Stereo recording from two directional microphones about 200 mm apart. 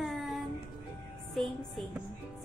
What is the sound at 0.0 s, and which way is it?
Music, centre (ahead or behind).